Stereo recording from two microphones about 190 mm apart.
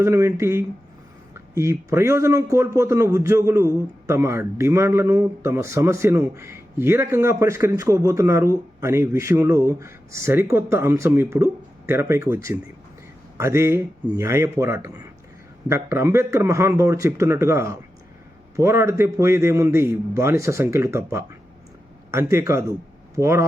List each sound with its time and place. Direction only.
0.0 s a man's voice: 15° right (ahead or behind)